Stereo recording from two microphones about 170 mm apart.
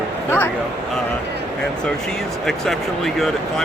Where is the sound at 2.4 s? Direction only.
Centre (ahead or behind).